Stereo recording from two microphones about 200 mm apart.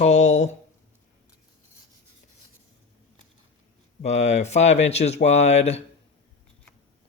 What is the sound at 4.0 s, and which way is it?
Speech, 35° left (ahead or behind).